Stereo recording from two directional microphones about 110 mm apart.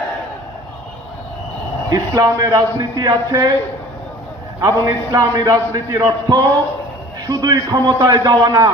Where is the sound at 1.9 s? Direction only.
35° right (ahead or behind).